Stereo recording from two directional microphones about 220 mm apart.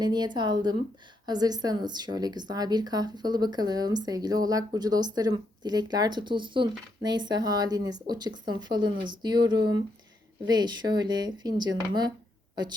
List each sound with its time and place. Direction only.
0.0 s speech: 20° right (ahead or behind)